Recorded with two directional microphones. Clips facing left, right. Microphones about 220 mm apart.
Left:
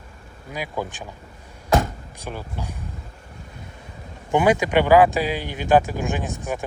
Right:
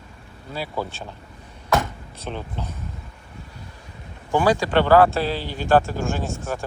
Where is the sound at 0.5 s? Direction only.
15° left (ahead or behind).